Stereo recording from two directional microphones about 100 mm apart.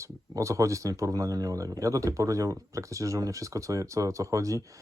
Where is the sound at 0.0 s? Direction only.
30° right (ahead or behind).